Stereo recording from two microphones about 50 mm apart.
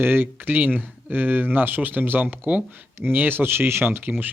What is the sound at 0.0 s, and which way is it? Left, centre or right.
Speech, right.